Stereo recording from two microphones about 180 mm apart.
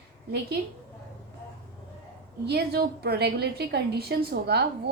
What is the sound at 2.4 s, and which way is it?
A woman's voice, 65° right (ahead or behind).